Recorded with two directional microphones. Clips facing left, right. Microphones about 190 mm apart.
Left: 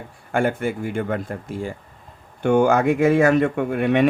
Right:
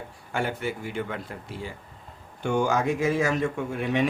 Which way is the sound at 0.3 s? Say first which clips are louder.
Left 8 dB; 50° left (ahead or behind).